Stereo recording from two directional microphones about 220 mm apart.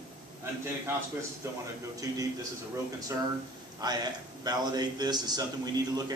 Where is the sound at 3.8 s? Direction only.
20° right (ahead or behind).